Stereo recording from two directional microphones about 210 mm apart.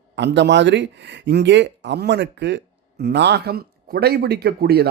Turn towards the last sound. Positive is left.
turn(degrees=-50)  # may be behind; listen again after turning